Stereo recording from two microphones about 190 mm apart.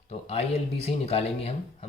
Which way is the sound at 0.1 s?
30° left (ahead or behind).